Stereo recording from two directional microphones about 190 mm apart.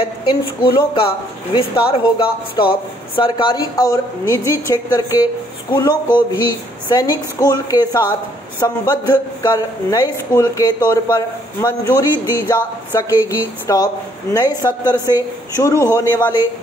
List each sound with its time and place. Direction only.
0.0 s speech: 25° left (ahead or behind)
13.2 s a woman's voice: 10° right (ahead or behind)
13.7 s a man's voice: 20° left (ahead or behind)